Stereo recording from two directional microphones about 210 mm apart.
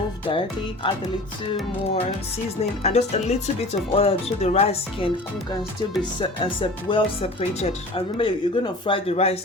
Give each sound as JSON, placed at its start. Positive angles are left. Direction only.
{"t": 0.3, "sound": "speech", "side_deg": 25}
{"t": 2.8, "sound": "speech", "side_deg": 30}